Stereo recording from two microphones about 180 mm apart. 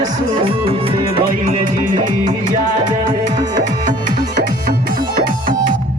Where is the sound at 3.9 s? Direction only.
50° right (ahead or behind).